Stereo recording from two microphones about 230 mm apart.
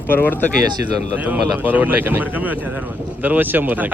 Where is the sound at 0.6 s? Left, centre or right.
Centre.